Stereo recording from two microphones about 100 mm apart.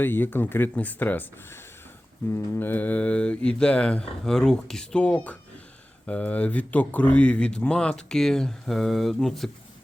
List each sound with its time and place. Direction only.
0.0 s speech: 20° left (ahead or behind)
2.3 s speech: 20° left (ahead or behind); by 9.5 s centre (ahead or behind)